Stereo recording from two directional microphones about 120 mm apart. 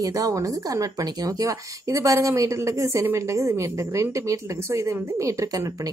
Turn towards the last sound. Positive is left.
turn(degrees=-25)  # may be behind; listen again after turning